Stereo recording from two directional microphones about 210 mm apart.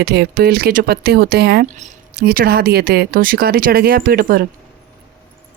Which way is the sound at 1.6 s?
35° right (ahead or behind).